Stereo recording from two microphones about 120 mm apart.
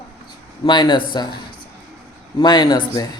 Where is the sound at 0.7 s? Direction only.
40° left (ahead or behind).